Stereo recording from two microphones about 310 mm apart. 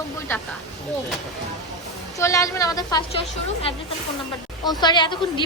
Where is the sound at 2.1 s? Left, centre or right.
Centre.